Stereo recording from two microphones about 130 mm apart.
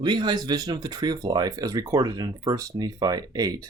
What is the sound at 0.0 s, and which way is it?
Speech, 35° right (ahead or behind).